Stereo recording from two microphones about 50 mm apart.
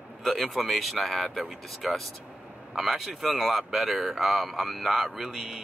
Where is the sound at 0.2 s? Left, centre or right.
Centre.